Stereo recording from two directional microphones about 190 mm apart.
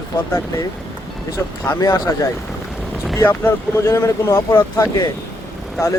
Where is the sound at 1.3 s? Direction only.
15° left (ahead or behind).